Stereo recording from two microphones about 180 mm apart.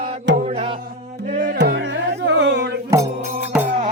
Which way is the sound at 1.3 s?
50° right (ahead or behind).